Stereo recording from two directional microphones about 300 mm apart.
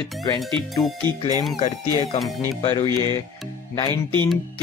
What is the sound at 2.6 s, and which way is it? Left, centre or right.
Speech, centre.